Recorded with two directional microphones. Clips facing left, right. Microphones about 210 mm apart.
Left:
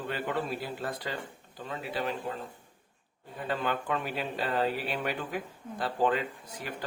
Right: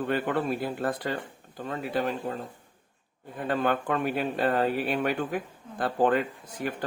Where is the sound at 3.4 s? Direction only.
50° right (ahead or behind).